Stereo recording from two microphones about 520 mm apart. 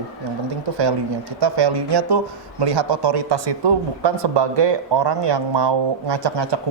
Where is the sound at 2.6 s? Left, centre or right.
Right.